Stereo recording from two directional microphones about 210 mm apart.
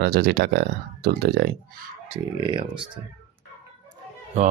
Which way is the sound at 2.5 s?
25° right (ahead or behind).